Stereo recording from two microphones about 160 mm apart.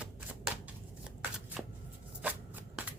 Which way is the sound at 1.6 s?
5° right (ahead or behind).